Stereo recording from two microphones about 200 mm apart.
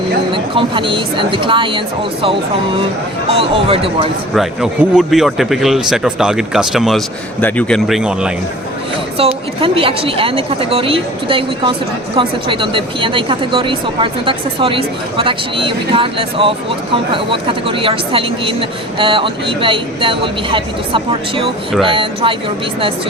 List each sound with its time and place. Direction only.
0.3 s speech: 25° right (ahead or behind)
4.4 s a man's voice: 5° right (ahead or behind)
9.1 s speech: 25° right (ahead or behind)